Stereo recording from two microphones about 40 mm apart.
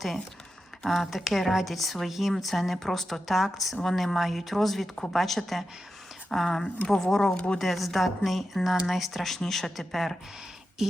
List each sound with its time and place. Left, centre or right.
0.9 s speech: centre
7.3 s speech: left
7.6 s speech: centre
10.8 s speech: centre